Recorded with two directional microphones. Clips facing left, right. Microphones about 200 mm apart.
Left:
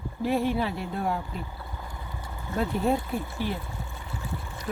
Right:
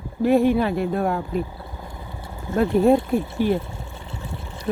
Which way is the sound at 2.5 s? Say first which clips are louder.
Right 9 dB; 50° right (ahead or behind).